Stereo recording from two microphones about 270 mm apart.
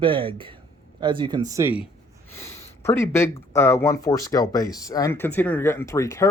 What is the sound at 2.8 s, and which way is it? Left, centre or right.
Speech, centre.